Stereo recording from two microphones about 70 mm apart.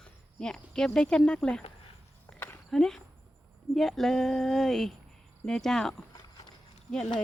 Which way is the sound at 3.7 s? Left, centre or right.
Centre.